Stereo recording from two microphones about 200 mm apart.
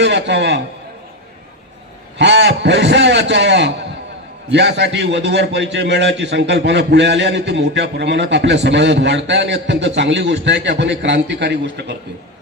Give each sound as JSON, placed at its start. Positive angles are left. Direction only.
{"t": 0.0, "sound": "a man's voice", "side_deg": -60}
{"t": 2.1, "sound": "a man's voice", "side_deg": -60}